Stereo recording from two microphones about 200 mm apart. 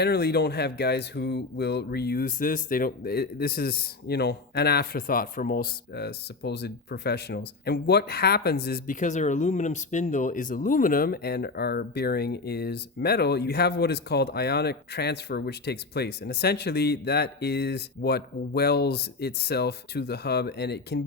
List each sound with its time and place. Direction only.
0.0 s speech: 55° left (ahead or behind)